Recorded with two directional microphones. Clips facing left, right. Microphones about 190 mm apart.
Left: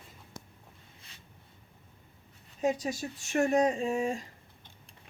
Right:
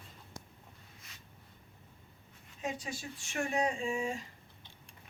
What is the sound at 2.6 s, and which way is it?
Speech, 40° left (ahead or behind).